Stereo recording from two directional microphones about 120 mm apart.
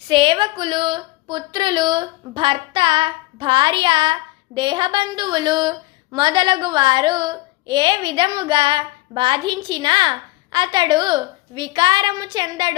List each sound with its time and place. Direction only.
0.1 s speech: 45° right (ahead or behind)